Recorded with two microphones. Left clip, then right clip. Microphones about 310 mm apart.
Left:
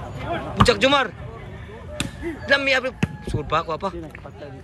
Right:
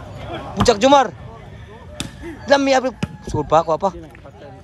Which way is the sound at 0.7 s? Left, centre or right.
Centre.